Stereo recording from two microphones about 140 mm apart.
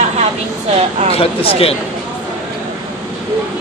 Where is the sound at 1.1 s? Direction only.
45° left (ahead or behind).